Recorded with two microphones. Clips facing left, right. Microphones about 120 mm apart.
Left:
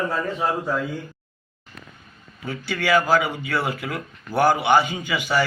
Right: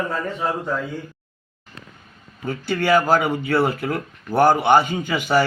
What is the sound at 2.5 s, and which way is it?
Speech, 45° right (ahead or behind).